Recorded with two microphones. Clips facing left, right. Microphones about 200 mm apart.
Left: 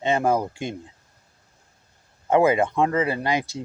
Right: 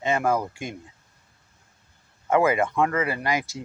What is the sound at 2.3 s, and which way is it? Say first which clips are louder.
Speech: left 2 dB; 25° left (ahead or behind).